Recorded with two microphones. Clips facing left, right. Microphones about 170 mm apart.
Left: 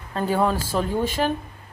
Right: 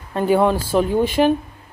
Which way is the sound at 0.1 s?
15° right (ahead or behind).